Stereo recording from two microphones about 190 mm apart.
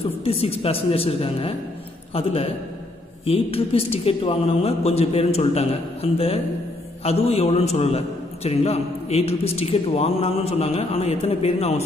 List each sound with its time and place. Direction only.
0.2 s a man's voice: 30° left (ahead or behind)